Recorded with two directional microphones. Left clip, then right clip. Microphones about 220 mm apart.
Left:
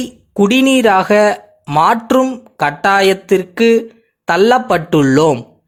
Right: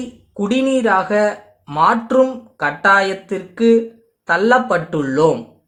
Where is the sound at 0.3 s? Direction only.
40° left (ahead or behind).